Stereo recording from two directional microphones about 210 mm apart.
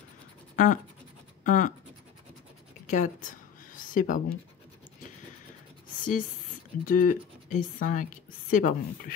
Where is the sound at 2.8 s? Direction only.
35° left (ahead or behind).